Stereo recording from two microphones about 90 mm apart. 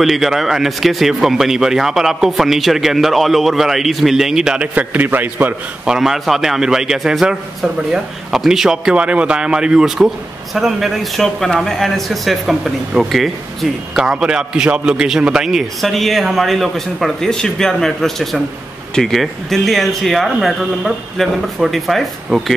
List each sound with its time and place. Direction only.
0.0 s a man's voice: 5° right (ahead or behind)
4.7 s a man's voice: 20° right (ahead or behind)
5.9 s a man's voice: 5° right (ahead or behind)